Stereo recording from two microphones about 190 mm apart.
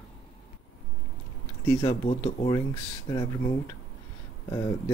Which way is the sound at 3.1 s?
20° left (ahead or behind).